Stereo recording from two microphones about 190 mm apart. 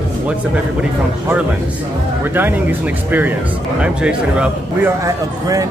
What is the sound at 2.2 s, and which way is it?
Speech, 10° right (ahead or behind).